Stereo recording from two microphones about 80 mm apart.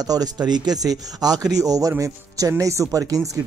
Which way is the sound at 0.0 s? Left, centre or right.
Right.